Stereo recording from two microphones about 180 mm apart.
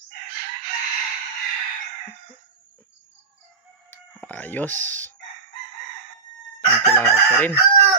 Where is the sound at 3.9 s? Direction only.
10° left (ahead or behind).